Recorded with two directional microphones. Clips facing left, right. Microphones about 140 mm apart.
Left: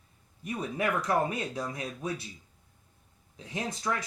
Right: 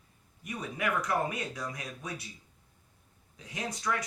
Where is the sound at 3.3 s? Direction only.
25° left (ahead or behind).